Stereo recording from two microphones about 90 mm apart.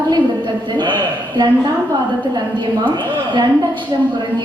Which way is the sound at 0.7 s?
60° right (ahead or behind).